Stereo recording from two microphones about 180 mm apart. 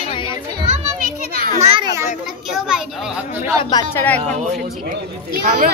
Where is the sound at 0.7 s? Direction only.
50° right (ahead or behind).